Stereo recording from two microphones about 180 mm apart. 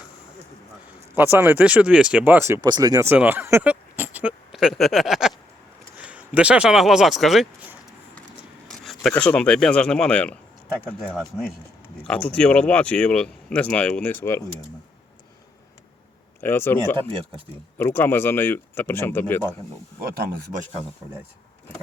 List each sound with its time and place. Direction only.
1.1 s speech: 10° right (ahead or behind); by 14.4 s 10° left (ahead or behind)
16.4 s speech: 10° left (ahead or behind)
20.0 s speech: 55° right (ahead or behind)